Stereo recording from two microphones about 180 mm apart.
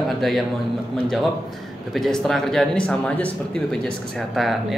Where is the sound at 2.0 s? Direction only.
Centre (ahead or behind).